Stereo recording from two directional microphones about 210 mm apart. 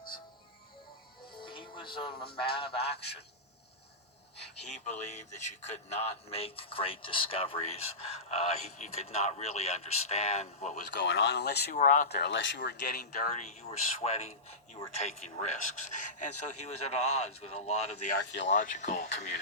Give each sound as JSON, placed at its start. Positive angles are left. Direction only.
{"t": 1.4, "sound": "music", "side_deg": 25}
{"t": 2.6, "sound": "a sound", "side_deg": 25}
{"t": 4.4, "sound": "a man's voice", "side_deg": 30}
{"t": 10.9, "sound": "speech", "side_deg": 60}
{"t": 11.7, "sound": "a man's voice", "side_deg": 40}
{"t": 16.3, "sound": "speech", "side_deg": 90}
{"t": 16.8, "sound": "a man's voice", "side_deg": 30}
{"t": 18.2, "sound": "speech", "side_deg": 55}
{"t": 18.5, "sound": "a man's voice", "side_deg": 40}